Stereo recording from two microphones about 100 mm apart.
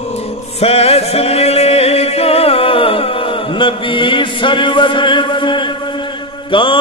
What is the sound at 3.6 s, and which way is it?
Chant, 55° left (ahead or behind).